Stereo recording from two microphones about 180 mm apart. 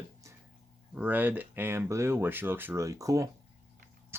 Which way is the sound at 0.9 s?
10° right (ahead or behind).